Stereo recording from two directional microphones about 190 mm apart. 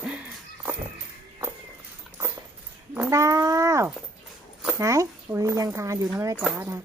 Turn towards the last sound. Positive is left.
turn(degrees=-15)  # may be behind; listen again after turning